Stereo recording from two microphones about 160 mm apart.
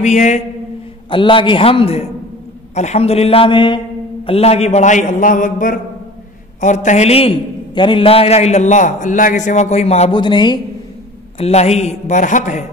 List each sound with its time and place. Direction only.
0.0 s a man's voice: 45° left (ahead or behind)
1.1 s a man's voice: 30° left (ahead or behind)
11.3 s a man's voice: 40° left (ahead or behind)